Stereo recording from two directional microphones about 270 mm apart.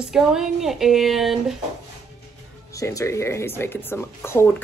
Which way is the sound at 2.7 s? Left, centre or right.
Centre.